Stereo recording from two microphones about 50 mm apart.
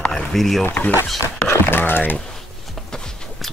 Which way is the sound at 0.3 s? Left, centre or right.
Centre.